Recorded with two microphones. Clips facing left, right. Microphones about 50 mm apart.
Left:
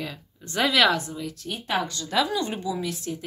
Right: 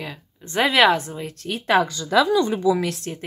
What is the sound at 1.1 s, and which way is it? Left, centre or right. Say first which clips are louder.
Speech: right 2 dB; right.